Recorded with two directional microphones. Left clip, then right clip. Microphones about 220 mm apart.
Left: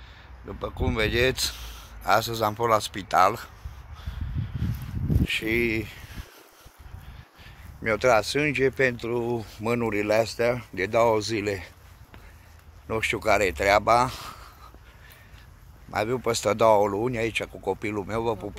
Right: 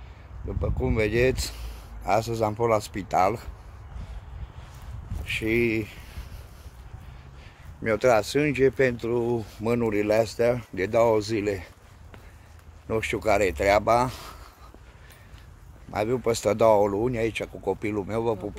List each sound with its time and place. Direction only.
0.5 s speech: centre (ahead or behind)
5.2 s speech: 5° left (ahead or behind)
7.8 s speech: 10° right (ahead or behind)
12.8 s speech: centre (ahead or behind)
15.9 s speech: 5° left (ahead or behind)